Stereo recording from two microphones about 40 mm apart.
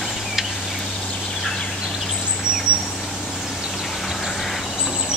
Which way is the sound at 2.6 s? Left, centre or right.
Right.